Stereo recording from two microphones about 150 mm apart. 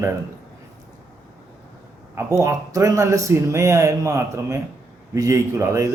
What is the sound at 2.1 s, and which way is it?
A man's voice, 20° right (ahead or behind).